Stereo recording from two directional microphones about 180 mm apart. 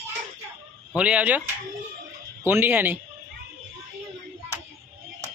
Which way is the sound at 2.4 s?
10° right (ahead or behind).